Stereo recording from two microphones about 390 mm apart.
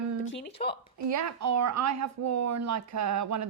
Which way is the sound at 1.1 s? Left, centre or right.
Right.